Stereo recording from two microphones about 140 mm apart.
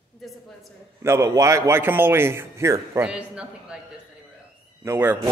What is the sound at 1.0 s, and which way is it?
A man's voice, 20° right (ahead or behind).